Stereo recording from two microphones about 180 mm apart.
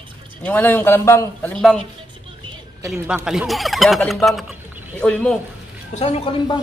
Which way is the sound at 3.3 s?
Centre (ahead or behind).